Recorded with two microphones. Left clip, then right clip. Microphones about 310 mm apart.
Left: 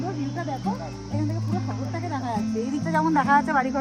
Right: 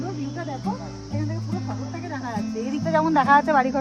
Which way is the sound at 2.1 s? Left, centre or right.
Centre.